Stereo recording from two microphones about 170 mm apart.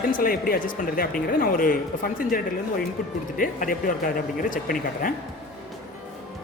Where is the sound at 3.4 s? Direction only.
55° left (ahead or behind).